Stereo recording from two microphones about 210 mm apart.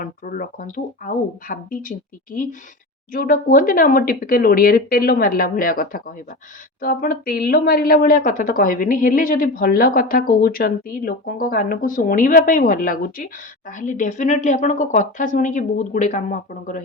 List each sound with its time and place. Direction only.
0.0 s a woman's voice: 40° left (ahead or behind)